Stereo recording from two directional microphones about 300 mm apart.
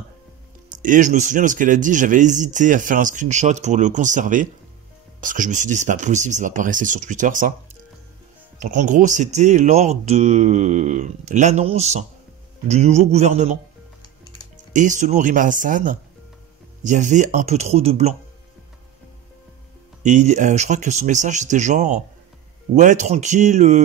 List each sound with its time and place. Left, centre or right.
0.7 s speech: right
8.5 s speech: right
14.0 s music: centre
14.7 s speech: right
20.0 s speech: right